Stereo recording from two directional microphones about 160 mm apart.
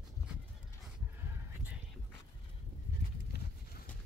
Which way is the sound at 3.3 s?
90° left.